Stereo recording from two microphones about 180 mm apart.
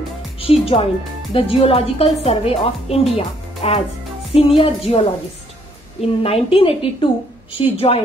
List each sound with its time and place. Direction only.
0.4 s a woman's voice: 35° left (ahead or behind)